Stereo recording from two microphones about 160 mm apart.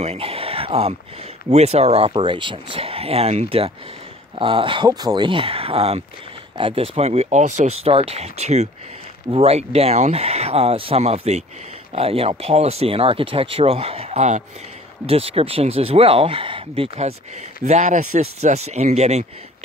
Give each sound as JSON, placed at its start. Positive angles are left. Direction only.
{"t": 0.0, "sound": "speech", "side_deg": -40}
{"t": 17.6, "sound": "speech", "side_deg": -50}